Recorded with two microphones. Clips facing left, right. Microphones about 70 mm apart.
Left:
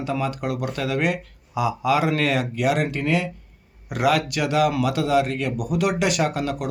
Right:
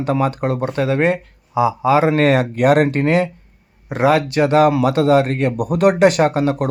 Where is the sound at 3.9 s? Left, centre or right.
Right.